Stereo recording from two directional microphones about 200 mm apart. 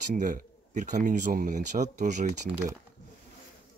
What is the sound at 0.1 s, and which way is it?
Speech, 40° right (ahead or behind).